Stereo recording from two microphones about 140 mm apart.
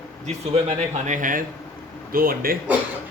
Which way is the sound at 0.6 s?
65° right (ahead or behind).